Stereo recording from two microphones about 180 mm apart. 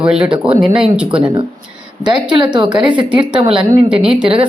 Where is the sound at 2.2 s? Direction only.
25° right (ahead or behind).